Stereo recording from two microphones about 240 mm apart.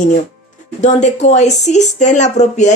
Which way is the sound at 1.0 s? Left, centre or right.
Left.